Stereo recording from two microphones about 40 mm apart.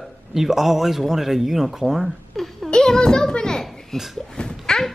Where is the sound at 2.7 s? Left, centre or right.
Left.